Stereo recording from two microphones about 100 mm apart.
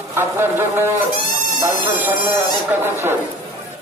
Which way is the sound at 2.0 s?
20° right (ahead or behind).